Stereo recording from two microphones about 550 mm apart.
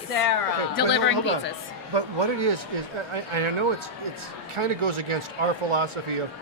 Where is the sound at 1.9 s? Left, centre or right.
Right.